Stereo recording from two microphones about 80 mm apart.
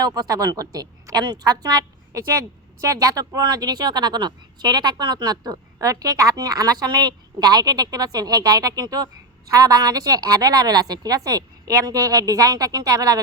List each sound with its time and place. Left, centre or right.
0.0 s a woman's voice: right
2.8 s a woman's voice: right